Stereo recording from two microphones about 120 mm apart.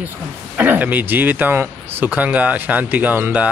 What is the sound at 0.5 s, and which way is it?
Speech, 15° right (ahead or behind).